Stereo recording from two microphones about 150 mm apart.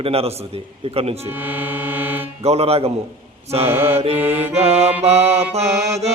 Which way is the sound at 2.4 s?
45° right (ahead or behind).